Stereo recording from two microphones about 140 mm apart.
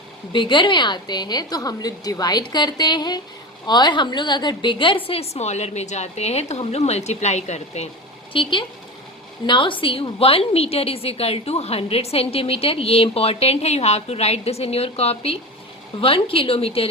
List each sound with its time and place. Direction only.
0.3 s a woman's voice: 35° left (ahead or behind); by 7.9 s 55° left (ahead or behind)
8.3 s a woman's voice: 35° left (ahead or behind)